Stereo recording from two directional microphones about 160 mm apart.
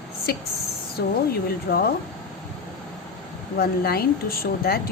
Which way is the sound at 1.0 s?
85° left.